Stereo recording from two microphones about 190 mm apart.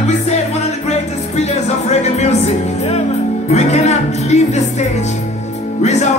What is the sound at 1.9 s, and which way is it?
Music, 35° left (ahead or behind).